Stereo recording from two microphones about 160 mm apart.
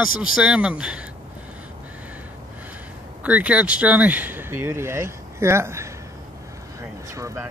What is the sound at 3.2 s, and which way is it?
Speech, 10° right (ahead or behind).